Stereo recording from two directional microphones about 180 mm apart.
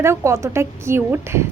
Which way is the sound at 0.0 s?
15° right (ahead or behind).